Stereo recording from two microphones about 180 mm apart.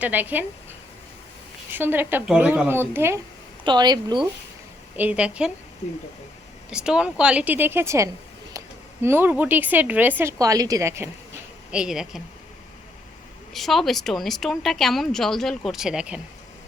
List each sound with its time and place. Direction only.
0.0 s speech: 10° right (ahead or behind)
1.7 s speech: 10° right (ahead or behind)
3.6 s speech: 25° right (ahead or behind)
4.9 s speech: 10° right (ahead or behind)
6.7 s speech: 5° right (ahead or behind)
11.7 s a woman's voice: 5° right (ahead or behind)
13.5 s a woman's voice: centre (ahead or behind)